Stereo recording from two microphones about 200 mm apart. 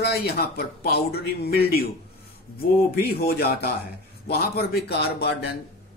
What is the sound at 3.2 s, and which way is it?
Speech, 50° left (ahead or behind).